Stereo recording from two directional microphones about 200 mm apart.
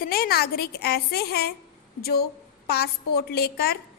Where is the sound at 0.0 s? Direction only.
50° left (ahead or behind).